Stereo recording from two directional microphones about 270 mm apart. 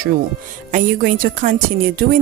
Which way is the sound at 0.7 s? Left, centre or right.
Right.